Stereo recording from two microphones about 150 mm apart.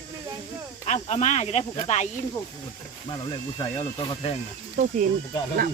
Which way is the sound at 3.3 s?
30° left (ahead or behind).